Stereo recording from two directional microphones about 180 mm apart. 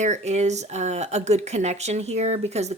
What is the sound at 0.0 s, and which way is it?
Speech, 40° right (ahead or behind).